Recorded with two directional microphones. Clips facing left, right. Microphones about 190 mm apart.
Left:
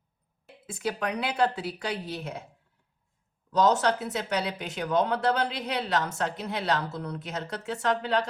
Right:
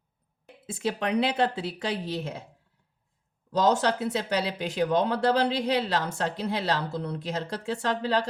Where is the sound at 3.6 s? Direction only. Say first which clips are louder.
Even; 30° right (ahead or behind).